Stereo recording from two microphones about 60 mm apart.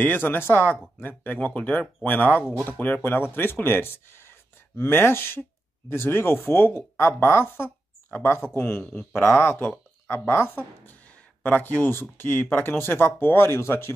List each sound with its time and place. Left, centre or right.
0.0 s speech: left
10.9 s a sound: left
11.9 s speech: left